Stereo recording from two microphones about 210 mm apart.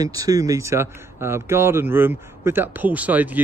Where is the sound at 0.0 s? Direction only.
15° right (ahead or behind).